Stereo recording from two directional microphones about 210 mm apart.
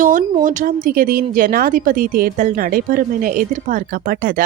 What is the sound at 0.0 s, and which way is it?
A woman's voice, 40° right (ahead or behind).